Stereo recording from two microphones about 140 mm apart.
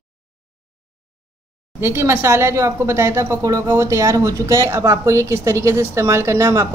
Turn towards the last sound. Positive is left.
turn(degrees=-20)  # may be behind; listen again after turning